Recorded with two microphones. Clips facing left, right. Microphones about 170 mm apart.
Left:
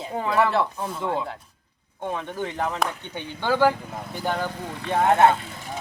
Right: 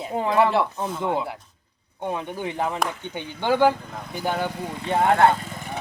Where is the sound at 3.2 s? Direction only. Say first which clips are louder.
Right 1 dB; 15° right (ahead or behind).